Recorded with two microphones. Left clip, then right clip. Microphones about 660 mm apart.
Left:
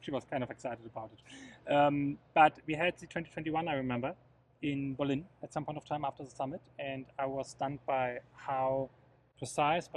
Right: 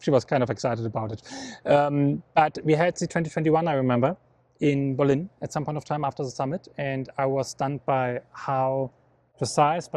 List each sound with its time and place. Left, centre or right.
0.0 s speech: right